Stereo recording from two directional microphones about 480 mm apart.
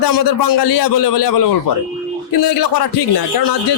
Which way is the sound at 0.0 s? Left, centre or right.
Left.